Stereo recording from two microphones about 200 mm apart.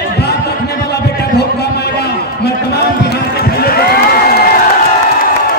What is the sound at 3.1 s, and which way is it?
Run, 50° left (ahead or behind).